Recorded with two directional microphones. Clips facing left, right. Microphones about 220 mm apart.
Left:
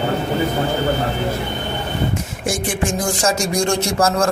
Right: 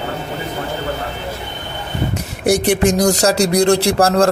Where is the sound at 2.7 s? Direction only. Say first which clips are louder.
Right 7 dB; 40° right (ahead or behind).